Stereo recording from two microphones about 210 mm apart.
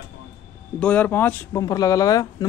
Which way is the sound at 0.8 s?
5° left (ahead or behind).